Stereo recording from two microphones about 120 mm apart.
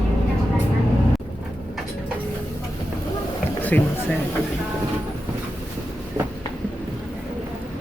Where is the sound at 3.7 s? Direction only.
15° left (ahead or behind).